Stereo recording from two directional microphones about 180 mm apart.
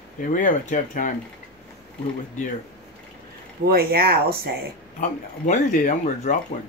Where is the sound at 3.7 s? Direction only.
60° right (ahead or behind).